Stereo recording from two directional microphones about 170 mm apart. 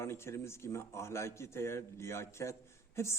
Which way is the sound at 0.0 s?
15° left (ahead or behind).